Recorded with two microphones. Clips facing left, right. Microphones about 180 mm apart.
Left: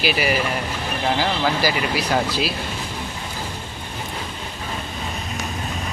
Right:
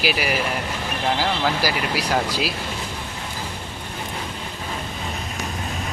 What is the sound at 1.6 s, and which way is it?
Speech, 10° right (ahead or behind).